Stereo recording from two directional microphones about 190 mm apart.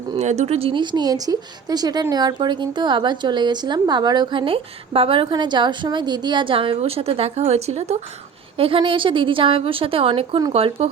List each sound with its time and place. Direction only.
0.2 s speech: 35° right (ahead or behind)